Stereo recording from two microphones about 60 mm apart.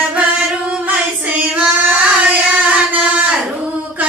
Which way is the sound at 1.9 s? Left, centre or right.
Right.